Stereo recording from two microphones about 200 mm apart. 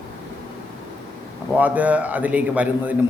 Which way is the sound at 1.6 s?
5° right (ahead or behind).